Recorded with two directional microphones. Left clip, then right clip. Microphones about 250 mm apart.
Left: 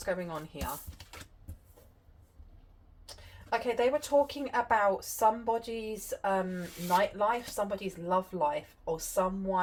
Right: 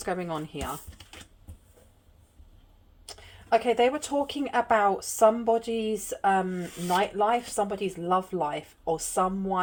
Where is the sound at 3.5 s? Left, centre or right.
Right.